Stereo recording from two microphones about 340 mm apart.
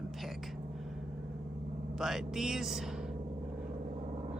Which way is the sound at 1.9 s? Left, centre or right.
Centre.